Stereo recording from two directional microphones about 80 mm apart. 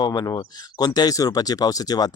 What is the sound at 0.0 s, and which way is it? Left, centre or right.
Speech, left.